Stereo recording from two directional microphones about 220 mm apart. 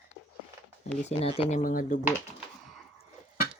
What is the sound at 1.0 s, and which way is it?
Speech, 25° left (ahead or behind).